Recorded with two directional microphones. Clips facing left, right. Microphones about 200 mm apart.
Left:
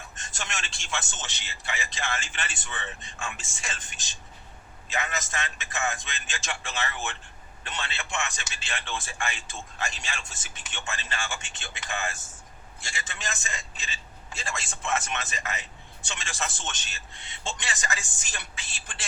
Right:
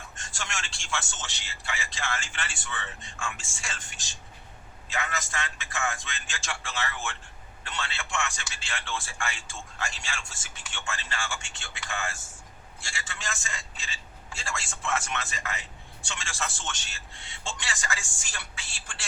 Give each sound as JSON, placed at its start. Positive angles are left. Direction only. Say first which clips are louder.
{"t": 0.2, "sound": "a man's voice", "louder": "left 1 dB", "side_deg": 20}